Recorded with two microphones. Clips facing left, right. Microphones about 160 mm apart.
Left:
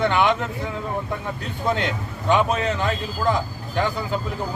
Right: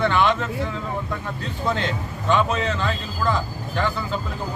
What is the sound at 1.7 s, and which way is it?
A man's voice, 15° left (ahead or behind).